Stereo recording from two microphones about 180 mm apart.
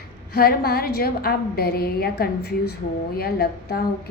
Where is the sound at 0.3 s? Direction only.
60° left (ahead or behind).